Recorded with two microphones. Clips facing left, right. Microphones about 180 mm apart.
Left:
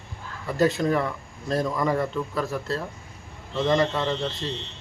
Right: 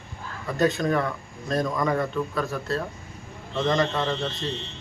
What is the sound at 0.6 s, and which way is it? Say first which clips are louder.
Speech: left 1 dB; 30° left (ahead or behind).